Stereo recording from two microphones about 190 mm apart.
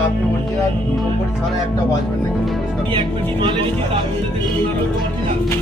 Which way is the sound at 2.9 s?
25° right (ahead or behind).